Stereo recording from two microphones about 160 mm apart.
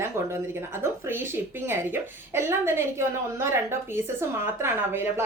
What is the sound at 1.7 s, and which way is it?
A woman's voice, 15° right (ahead or behind).